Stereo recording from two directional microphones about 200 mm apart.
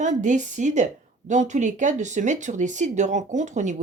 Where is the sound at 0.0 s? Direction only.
40° right (ahead or behind).